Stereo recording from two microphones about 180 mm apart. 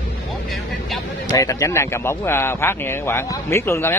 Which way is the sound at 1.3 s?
20° left (ahead or behind).